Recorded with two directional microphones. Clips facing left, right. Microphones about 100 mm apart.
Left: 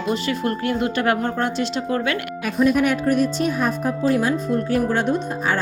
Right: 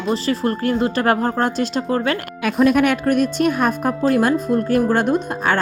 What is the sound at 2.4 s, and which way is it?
Speech, 85° right.